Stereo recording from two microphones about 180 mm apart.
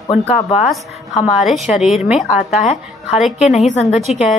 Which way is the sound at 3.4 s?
40° left (ahead or behind).